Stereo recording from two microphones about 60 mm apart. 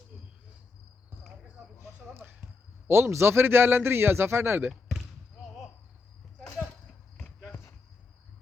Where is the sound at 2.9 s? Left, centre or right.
Right.